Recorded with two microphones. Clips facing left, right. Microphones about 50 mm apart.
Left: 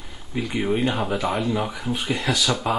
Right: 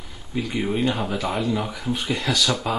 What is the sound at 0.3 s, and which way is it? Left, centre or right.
Speech, centre.